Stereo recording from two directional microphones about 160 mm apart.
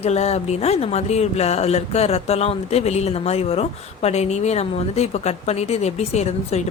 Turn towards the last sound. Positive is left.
turn(degrees=40)  # may be behind; listen again after turning